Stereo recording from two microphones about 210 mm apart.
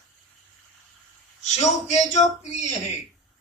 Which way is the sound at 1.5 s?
35° left (ahead or behind).